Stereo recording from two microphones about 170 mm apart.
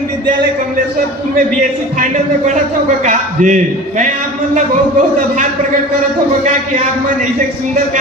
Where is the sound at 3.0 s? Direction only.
50° right (ahead or behind).